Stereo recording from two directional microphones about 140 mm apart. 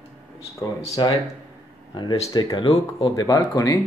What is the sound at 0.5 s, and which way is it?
Speech, 25° left (ahead or behind).